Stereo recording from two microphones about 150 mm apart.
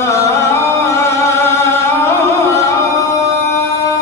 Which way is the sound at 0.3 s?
20° left (ahead or behind).